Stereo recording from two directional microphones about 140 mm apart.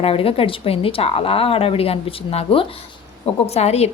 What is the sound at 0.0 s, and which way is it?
A woman's voice, 40° left (ahead or behind).